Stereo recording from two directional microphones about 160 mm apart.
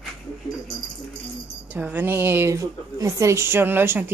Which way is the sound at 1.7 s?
10° right (ahead or behind).